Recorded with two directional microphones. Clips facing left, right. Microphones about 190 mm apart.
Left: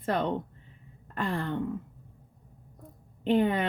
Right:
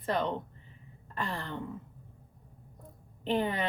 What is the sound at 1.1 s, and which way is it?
Throat clearing, 55° left (ahead or behind).